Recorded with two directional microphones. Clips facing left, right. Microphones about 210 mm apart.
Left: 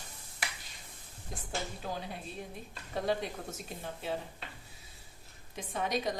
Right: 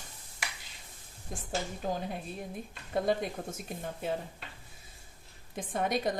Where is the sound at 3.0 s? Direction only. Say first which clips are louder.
Even; 50° right (ahead or behind).